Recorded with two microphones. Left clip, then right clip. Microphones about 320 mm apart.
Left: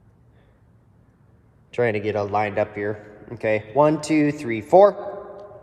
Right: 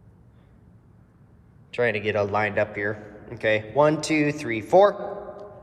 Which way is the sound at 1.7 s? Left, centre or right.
Centre.